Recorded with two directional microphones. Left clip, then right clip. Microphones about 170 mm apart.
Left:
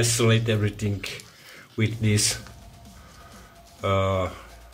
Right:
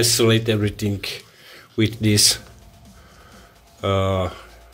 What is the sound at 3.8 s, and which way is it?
Speech, 30° right (ahead or behind).